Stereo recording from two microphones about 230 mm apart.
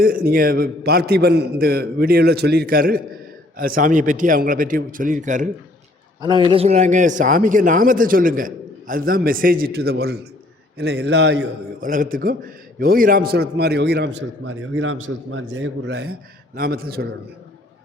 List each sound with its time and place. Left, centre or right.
0.0 s a man's voice: right
6.2 s a man's voice: centre; by 11.4 s right
11.8 s a man's voice: right